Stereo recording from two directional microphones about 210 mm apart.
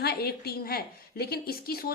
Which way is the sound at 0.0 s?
50° left (ahead or behind).